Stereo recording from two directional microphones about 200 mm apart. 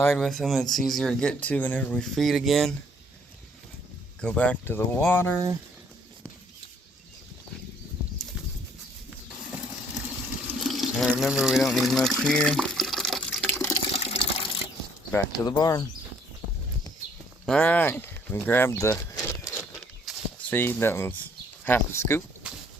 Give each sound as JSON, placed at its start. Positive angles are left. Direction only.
{"t": 0.1, "sound": "speech", "side_deg": 0}
{"t": 4.2, "sound": "speech", "side_deg": 5}
{"t": 10.4, "sound": "water", "side_deg": 0}
{"t": 13.4, "sound": "water", "side_deg": 10}
{"t": 13.9, "sound": "water", "side_deg": 30}
{"t": 15.4, "sound": "speech", "side_deg": 20}
{"t": 17.4, "sound": "speech", "side_deg": 5}
{"t": 19.8, "sound": "a sound", "side_deg": 5}
{"t": 21.6, "sound": "speech", "side_deg": 10}
{"t": 22.4, "sound": "a sound", "side_deg": -5}